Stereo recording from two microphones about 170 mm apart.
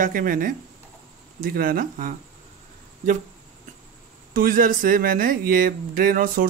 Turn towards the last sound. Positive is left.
turn(degrees=-55)  # may be behind; listen again after turning